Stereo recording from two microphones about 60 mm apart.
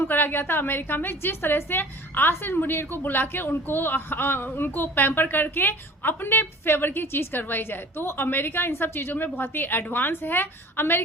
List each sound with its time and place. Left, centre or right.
0.1 s a woman's voice: left